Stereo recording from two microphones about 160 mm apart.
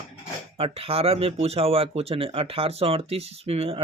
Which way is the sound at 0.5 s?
35° right (ahead or behind).